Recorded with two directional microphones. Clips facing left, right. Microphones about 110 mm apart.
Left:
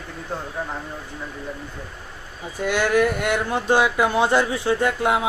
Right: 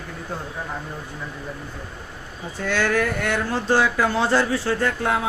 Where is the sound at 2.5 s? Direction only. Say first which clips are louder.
Left 2 dB; 15° left (ahead or behind).